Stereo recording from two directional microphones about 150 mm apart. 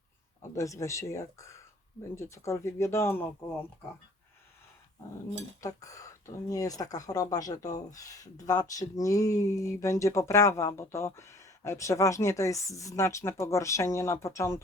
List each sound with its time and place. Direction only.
0.5 s speech: 20° left (ahead or behind)
5.5 s speech: 20° left (ahead or behind)